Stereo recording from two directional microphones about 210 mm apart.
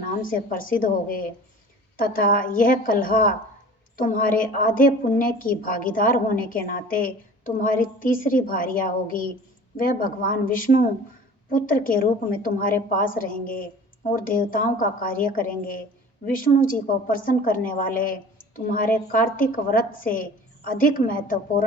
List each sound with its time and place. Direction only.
0.0 s a woman's voice: 40° left (ahead or behind)